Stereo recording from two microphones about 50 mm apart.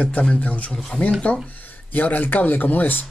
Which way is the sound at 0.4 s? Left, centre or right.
Left.